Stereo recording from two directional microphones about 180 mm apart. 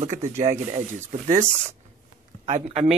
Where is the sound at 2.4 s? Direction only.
40° right (ahead or behind).